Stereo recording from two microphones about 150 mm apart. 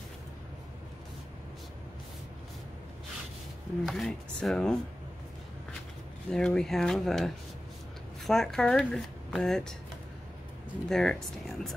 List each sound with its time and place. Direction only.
3.8 s speech: centre (ahead or behind)
6.3 s speech: 5° left (ahead or behind)
10.9 s speech: 5° left (ahead or behind)